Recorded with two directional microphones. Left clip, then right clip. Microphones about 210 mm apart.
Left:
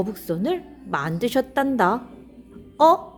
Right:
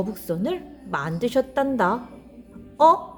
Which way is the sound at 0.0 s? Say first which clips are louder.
Left 1 dB; 20° left (ahead or behind).